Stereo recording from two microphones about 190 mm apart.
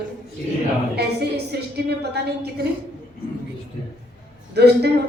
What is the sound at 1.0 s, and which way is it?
A woman's voice, 60° right (ahead or behind).